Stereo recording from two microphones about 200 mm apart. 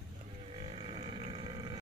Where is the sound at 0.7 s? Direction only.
25° right (ahead or behind).